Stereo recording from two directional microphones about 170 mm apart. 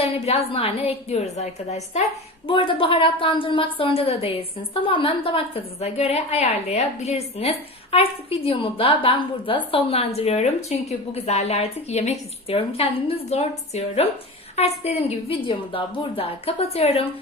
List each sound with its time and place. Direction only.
0.0 s a woman's voice: 35° left (ahead or behind)